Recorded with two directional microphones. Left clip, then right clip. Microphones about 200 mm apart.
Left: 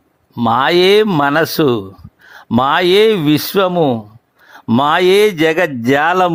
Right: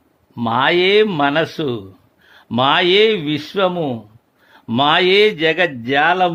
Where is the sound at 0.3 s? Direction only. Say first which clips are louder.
Left 3 dB; 25° left (ahead or behind).